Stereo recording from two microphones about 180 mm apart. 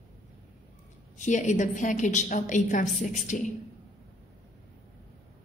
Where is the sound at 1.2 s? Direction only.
40° left (ahead or behind).